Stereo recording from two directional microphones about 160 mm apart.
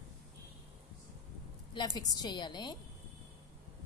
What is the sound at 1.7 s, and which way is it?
A woman's voice, 25° left (ahead or behind).